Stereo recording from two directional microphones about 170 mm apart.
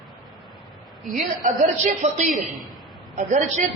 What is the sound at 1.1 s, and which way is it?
A woman's voice, 50° right (ahead or behind).